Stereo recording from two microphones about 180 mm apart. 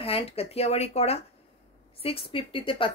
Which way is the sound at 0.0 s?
30° left (ahead or behind).